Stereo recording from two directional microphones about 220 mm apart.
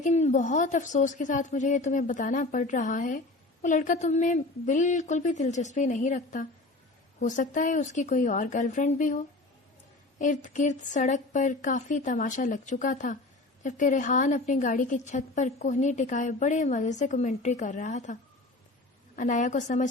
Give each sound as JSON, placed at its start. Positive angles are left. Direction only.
{"t": 0.0, "sound": "a woman's voice", "side_deg": 30}